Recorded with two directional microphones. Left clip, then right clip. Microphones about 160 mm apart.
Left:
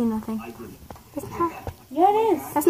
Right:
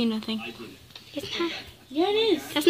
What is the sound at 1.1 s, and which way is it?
Speech, 40° right (ahead or behind).